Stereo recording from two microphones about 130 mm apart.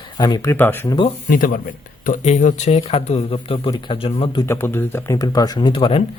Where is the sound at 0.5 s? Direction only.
15° left (ahead or behind).